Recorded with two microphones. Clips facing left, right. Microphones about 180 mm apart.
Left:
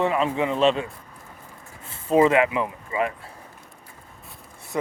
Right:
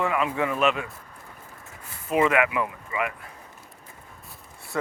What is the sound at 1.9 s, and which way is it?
Speech, 30° left (ahead or behind).